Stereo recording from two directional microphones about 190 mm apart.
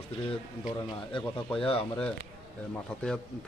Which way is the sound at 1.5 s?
5° left (ahead or behind).